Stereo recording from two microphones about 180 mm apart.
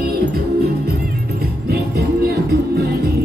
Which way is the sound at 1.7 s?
60° right (ahead or behind).